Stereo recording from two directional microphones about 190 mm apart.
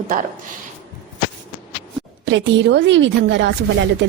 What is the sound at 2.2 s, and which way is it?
A woman's voice, 70° right (ahead or behind).